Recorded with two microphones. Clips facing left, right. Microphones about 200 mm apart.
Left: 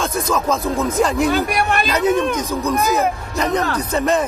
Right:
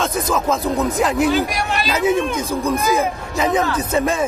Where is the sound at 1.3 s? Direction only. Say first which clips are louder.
Left 1 dB; 55° left (ahead or behind).